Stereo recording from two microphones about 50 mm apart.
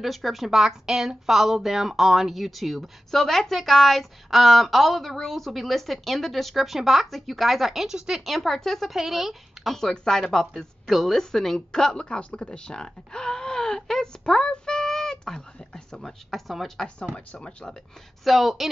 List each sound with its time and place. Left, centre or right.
0.0 s speech: centre
8.3 s speech: centre
8.9 s speech: centre
9.8 s a woman's voice: centre
18.2 s speech: centre